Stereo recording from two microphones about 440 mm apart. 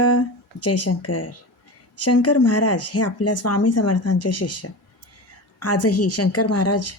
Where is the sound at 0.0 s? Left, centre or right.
Left.